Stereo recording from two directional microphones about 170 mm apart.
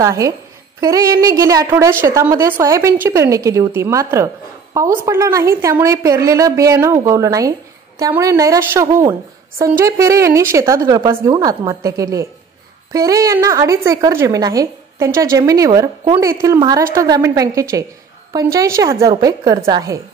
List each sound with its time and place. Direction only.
0.0 s a woman's voice: 20° right (ahead or behind)